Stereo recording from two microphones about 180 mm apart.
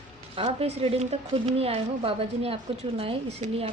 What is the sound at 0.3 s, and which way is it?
A woman's voice, 35° right (ahead or behind).